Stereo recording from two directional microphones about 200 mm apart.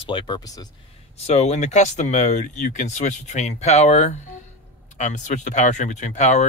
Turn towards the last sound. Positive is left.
turn(degrees=35)  # may be behind; listen again after turning